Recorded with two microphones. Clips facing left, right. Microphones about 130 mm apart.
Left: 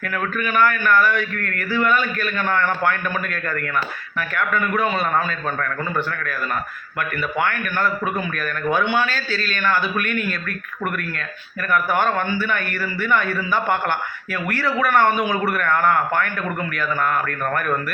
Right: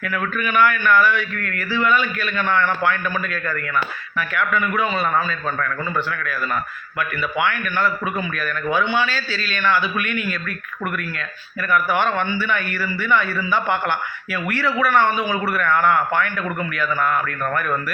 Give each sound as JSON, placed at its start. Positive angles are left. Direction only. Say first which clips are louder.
{"t": 0.0, "sound": "a man's voice", "louder": "even", "side_deg": 40}
{"t": 7.4, "sound": "a man's voice", "louder": "right 2 dB", "side_deg": 45}
{"t": 11.7, "sound": "a man's voice", "louder": "even", "side_deg": 45}